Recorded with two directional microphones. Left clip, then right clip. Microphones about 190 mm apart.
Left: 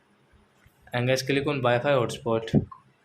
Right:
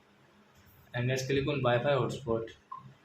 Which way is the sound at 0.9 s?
45° left (ahead or behind).